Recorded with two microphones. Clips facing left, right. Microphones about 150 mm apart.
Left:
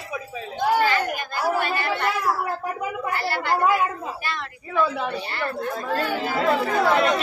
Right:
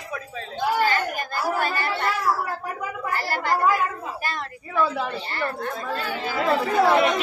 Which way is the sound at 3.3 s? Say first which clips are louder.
Right 1 dB; 40° right (ahead or behind).